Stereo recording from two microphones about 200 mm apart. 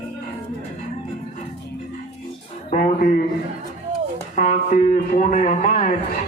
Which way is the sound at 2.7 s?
40° left (ahead or behind).